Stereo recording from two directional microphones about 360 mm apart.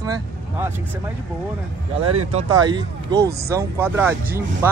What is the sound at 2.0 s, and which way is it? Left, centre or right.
Speech, right.